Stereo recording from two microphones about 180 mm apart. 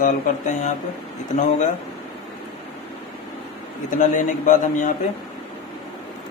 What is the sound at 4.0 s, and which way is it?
Speech, 45° left (ahead or behind).